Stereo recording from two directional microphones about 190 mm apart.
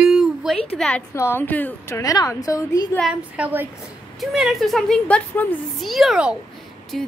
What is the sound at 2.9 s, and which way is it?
A woman's voice, 5° right (ahead or behind).